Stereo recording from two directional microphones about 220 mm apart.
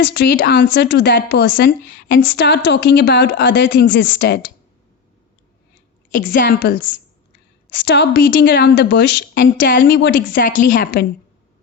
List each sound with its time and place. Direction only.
0.0 s a woman's voice: 50° left (ahead or behind)
6.1 s a woman's voice: 40° left (ahead or behind)
6.4 s a woman's voice: 50° left (ahead or behind)